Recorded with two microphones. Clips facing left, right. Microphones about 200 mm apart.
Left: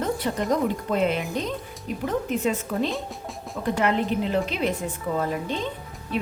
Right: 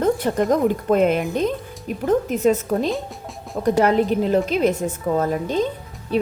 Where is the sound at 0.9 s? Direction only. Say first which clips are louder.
Right 6 dB; 50° right (ahead or behind).